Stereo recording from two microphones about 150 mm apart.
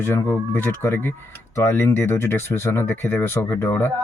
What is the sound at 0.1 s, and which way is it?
Speech, 15° left (ahead or behind).